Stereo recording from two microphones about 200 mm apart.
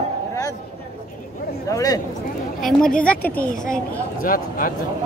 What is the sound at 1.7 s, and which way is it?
Speech, 15° left (ahead or behind).